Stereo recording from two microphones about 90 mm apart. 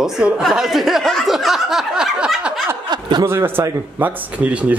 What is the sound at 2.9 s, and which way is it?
Chuckle, 55° right (ahead or behind).